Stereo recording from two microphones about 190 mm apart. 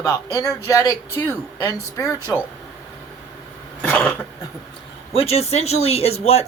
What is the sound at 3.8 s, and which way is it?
Cough, 10° left (ahead or behind).